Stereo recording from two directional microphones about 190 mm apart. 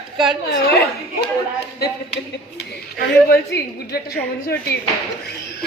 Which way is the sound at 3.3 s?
55° left (ahead or behind).